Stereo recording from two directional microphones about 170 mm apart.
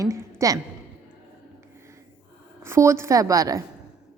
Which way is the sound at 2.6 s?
15° right (ahead or behind).